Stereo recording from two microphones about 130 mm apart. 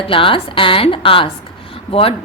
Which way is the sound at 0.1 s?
45° left (ahead or behind).